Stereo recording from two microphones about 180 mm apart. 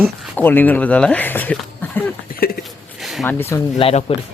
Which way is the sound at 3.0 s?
Centre (ahead or behind).